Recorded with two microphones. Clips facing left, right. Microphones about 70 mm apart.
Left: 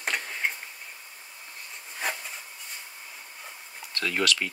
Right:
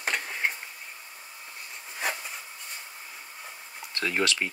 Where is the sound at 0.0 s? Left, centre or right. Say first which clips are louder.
Right 1 dB; centre.